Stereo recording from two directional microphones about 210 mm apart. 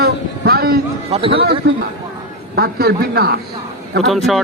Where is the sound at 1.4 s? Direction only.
50° right (ahead or behind).